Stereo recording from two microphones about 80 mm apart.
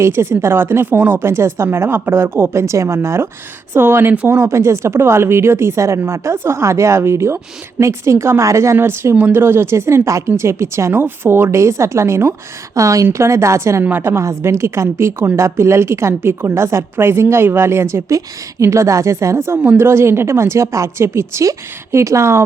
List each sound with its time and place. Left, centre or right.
0.0 s a woman's voice: right
13.8 s speech: right